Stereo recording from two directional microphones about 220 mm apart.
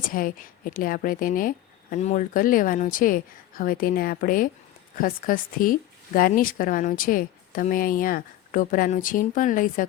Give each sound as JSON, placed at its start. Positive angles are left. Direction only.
{"t": 0.0, "sound": "speech", "side_deg": 40}